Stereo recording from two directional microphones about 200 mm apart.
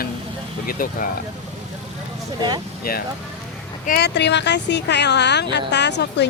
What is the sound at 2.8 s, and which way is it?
Speech, 50° left (ahead or behind).